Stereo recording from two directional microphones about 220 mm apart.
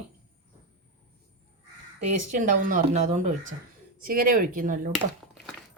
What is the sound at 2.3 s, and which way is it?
Speech, 35° right (ahead or behind).